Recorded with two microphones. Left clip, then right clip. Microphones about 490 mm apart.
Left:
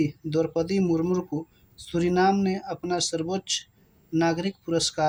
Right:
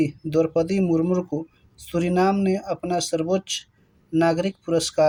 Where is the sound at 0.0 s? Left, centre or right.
Left.